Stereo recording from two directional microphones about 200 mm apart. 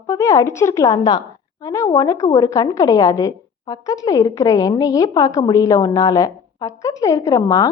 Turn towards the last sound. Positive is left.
turn(degrees=15)  # may be behind; listen again after turning